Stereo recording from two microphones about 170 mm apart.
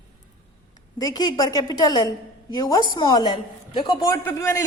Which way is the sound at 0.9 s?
20° left (ahead or behind).